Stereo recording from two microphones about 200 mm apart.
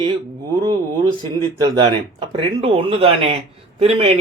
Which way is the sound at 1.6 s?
25° right (ahead or behind).